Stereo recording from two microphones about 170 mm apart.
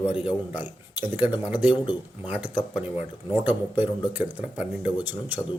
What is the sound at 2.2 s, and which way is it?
Speech, 10° right (ahead or behind).